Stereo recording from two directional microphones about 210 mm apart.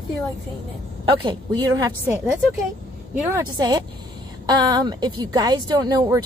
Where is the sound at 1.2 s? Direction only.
20° right (ahead or behind).